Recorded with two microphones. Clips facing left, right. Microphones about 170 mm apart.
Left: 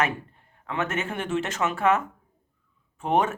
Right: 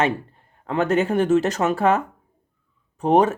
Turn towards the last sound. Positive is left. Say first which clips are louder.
# right 7 dB
turn(degrees=-35)  # may be behind; listen again after turning